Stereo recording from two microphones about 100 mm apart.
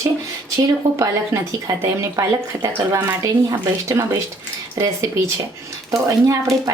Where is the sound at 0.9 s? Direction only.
30° right (ahead or behind).